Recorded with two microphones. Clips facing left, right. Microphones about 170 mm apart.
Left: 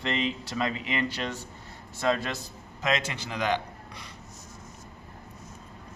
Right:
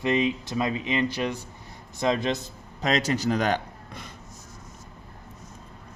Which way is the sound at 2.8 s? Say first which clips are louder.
Right 5 dB; 35° right (ahead or behind).